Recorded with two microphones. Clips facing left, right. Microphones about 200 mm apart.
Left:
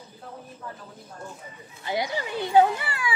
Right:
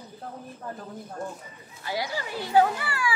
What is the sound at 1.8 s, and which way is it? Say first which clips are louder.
Speech: left 3 dB; 20° left (ahead or behind).